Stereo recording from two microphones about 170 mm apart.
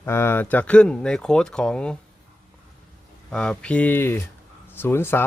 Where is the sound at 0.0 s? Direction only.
15° left (ahead or behind).